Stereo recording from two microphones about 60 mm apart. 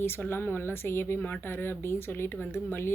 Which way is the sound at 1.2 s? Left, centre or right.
Left.